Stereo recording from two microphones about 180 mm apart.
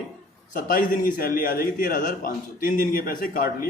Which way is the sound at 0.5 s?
50° left (ahead or behind).